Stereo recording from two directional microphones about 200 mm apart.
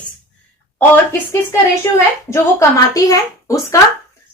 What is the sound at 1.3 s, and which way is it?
A woman's voice, 15° left (ahead or behind).